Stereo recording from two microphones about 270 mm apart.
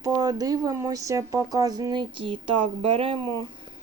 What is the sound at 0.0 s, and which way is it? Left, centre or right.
Speech, centre.